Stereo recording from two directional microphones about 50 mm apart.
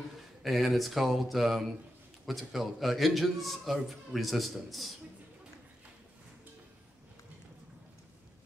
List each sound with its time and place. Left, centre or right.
0.4 s a man's voice: centre